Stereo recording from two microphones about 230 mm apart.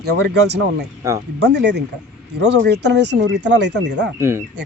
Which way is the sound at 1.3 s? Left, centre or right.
Right.